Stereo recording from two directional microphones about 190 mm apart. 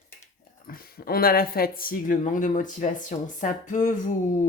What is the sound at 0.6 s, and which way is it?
Speech, 50° left (ahead or behind).